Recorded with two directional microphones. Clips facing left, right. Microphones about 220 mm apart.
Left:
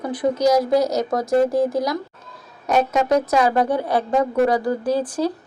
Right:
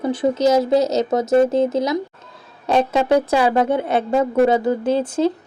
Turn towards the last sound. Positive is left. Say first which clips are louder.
# right 3 dB
turn(degrees=-25)  # may be behind; listen again after turning